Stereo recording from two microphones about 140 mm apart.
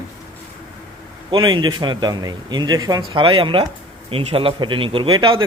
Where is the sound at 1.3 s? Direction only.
35° right (ahead or behind).